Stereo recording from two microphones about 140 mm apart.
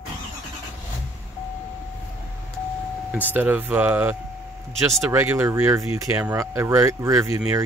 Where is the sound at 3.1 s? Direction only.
15° right (ahead or behind).